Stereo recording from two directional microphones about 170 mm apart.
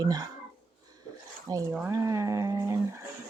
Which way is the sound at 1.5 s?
20° right (ahead or behind).